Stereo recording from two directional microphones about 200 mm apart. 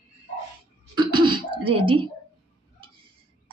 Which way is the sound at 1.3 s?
25° right (ahead or behind).